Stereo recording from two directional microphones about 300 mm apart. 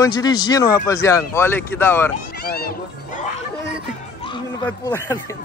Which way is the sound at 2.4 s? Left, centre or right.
Left.